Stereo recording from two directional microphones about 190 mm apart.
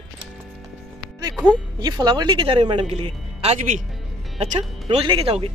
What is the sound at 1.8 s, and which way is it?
A man's voice, 20° right (ahead or behind).